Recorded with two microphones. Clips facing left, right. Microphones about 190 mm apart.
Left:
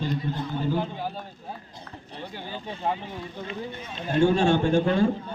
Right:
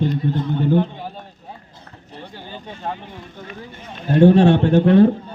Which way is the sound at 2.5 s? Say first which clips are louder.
Left 1 dB; 10° left (ahead or behind).